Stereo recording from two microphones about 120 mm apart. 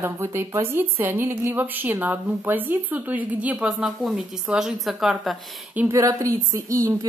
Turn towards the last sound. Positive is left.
turn(degrees=-25)  # may be behind; listen again after turning